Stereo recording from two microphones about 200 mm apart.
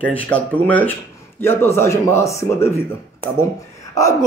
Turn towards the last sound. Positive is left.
turn(degrees=15)  # may be behind; listen again after turning